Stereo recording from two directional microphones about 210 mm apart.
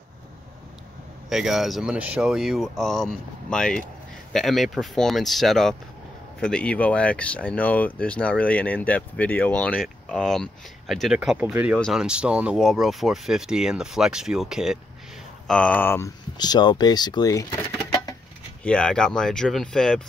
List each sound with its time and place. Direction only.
1.3 s speech: centre (ahead or behind); by 17.6 s 15° left (ahead or behind)
18.6 s speech: 5° left (ahead or behind)